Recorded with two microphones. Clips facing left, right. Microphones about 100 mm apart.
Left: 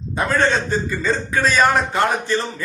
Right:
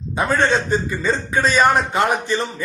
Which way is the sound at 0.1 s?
20° right (ahead or behind).